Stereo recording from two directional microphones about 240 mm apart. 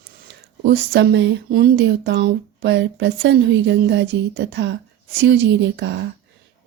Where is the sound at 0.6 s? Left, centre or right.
Right.